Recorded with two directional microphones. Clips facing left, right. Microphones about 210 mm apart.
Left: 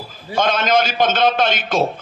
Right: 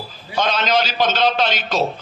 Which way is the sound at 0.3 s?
50° left (ahead or behind).